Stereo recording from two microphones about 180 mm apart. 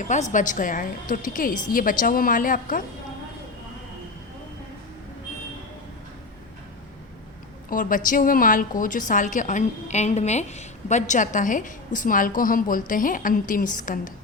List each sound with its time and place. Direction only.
0.1 s a woman's voice: 45° left (ahead or behind)
7.7 s a woman's voice: 50° left (ahead or behind)